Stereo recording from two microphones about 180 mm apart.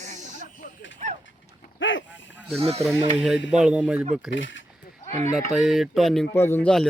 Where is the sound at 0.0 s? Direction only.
40° right (ahead or behind).